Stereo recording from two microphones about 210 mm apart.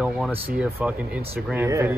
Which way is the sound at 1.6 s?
15° right (ahead or behind).